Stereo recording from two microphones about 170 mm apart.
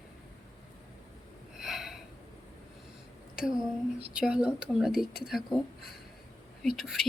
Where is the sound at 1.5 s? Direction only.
Centre (ahead or behind).